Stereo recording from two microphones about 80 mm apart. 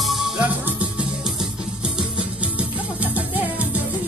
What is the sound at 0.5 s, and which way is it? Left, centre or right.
Music, centre.